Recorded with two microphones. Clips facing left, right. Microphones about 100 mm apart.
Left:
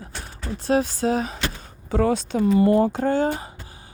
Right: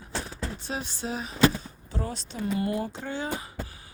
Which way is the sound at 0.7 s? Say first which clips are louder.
Left 15 dB; 65° left (ahead or behind).